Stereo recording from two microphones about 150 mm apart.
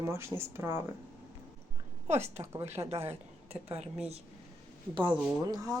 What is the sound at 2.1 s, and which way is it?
Speech, 20° right (ahead or behind).